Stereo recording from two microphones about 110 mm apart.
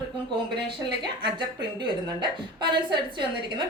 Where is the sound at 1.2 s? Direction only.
45° right (ahead or behind).